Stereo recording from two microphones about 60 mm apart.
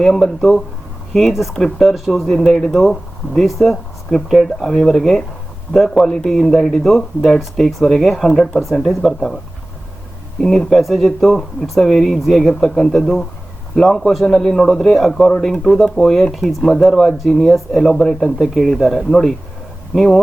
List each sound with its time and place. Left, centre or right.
0.0 s speech: centre
10.4 s speech: centre